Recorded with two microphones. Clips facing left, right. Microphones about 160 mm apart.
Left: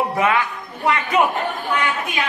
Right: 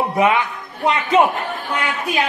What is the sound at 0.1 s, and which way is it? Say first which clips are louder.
A man's voice: right 2 dB; 20° right (ahead or behind).